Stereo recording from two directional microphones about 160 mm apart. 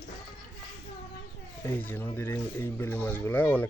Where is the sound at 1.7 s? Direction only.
10° left (ahead or behind).